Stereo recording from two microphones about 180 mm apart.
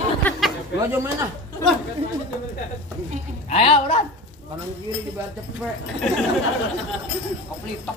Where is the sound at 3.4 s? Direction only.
30° left (ahead or behind).